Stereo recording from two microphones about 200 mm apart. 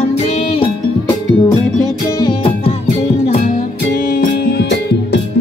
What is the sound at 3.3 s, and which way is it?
Music, 40° left (ahead or behind).